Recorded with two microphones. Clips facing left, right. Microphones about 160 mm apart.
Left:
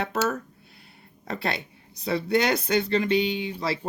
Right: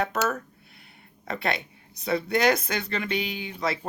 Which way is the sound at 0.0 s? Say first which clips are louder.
Even; 30° left (ahead or behind).